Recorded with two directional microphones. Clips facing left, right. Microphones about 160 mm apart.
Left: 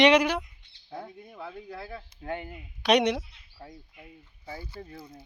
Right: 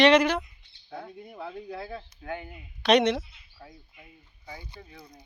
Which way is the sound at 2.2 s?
30° left (ahead or behind).